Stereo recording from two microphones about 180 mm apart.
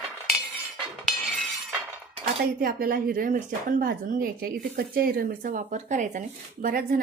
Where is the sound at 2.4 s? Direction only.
55° right (ahead or behind).